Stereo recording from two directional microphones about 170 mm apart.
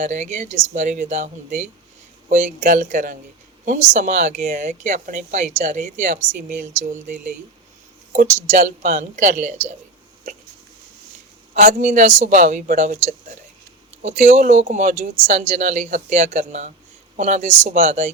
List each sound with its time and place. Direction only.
0.0 s a woman's voice: 45° right (ahead or behind)
11.5 s a woman's voice: 50° right (ahead or behind)